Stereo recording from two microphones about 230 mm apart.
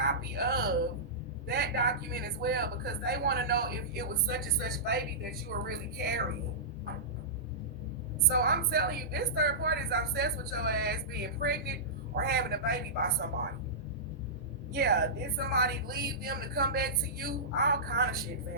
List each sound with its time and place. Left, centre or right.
0.0 s a sound: right
1.5 s a woman's voice: right
8.3 s a woman's voice: right
14.7 s a woman's voice: right